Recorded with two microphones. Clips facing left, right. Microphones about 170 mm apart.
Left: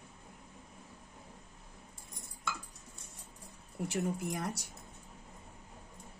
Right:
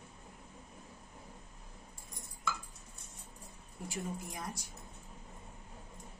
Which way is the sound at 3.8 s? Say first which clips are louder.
Left 6 dB; 75° left (ahead or behind).